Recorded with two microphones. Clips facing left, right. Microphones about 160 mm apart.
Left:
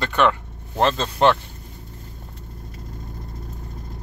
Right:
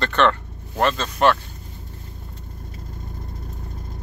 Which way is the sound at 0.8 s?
25° left (ahead or behind).